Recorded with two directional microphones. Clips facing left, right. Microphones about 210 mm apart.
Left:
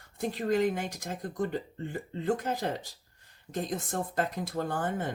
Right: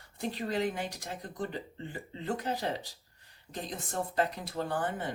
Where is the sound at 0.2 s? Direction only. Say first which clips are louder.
Left 5 dB; 45° left (ahead or behind).